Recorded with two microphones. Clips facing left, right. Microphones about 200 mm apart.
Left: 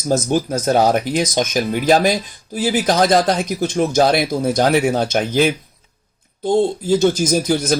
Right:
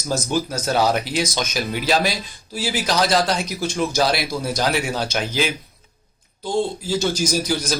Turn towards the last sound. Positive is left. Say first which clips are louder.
# left 5 dB
turn(degrees=50)  # may be behind; listen again after turning